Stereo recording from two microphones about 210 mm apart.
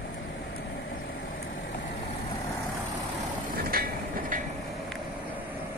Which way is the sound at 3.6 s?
45° right (ahead or behind).